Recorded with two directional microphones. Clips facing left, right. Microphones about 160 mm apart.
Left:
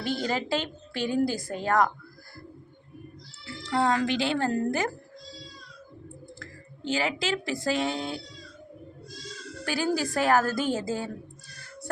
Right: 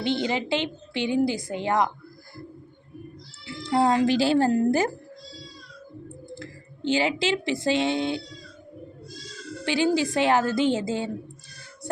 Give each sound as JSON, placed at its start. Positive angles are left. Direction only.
{"t": 0.2, "sound": "a woman's voice", "side_deg": -20}
{"t": 3.6, "sound": "speech", "side_deg": -30}
{"t": 6.3, "sound": "speech", "side_deg": -25}
{"t": 9.6, "sound": "a woman's voice", "side_deg": -25}